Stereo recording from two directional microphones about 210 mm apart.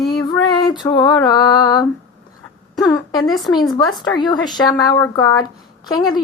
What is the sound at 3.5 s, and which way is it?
Female singing, 20° left (ahead or behind).